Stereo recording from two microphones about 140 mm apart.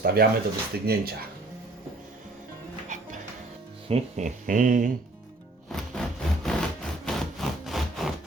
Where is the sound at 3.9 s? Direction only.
60° right (ahead or behind).